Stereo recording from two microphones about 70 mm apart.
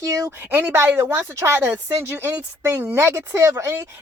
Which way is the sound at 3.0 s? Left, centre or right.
Right.